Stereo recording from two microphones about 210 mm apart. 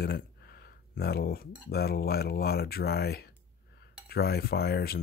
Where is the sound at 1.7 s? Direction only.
50° left (ahead or behind).